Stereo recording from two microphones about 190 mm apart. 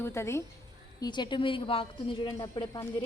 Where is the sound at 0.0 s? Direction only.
15° left (ahead or behind).